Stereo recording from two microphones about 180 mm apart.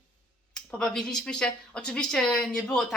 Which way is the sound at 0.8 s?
5° left (ahead or behind).